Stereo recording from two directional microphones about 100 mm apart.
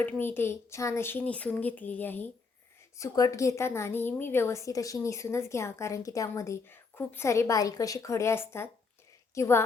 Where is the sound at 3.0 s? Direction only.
35° left (ahead or behind).